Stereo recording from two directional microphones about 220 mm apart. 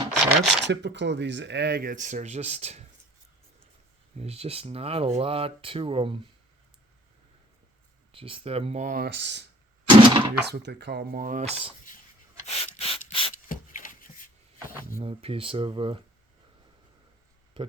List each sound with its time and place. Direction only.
0.1 s a sound: centre (ahead or behind)
0.6 s speech: 50° right (ahead or behind); by 2.8 s 30° right (ahead or behind)
4.2 s speech: 25° right (ahead or behind)
8.1 s speech: 25° right (ahead or behind)
9.0 s speech: 50° right (ahead or behind)
9.8 s a sound: 20° right (ahead or behind)
10.4 s speech: 50° right (ahead or behind); by 11.7 s 30° right (ahead or behind)
12.5 s mechanisms: 25° left (ahead or behind)
13.5 s a sound: 40° left (ahead or behind)
15.0 s speech: 25° right (ahead or behind)